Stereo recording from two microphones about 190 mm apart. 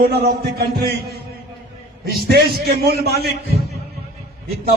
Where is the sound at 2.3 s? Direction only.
55° right (ahead or behind).